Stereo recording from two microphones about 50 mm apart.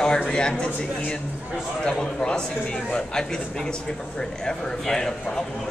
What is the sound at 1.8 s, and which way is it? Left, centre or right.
A man's voice, centre.